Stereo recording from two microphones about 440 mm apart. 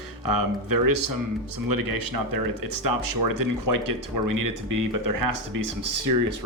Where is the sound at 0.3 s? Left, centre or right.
Right.